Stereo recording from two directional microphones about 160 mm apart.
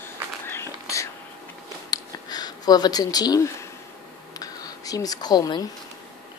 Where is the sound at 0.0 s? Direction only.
15° left (ahead or behind).